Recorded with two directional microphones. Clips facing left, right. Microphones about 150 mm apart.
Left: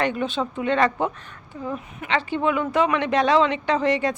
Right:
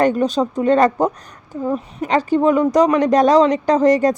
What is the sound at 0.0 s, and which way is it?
Speech, 40° right (ahead or behind).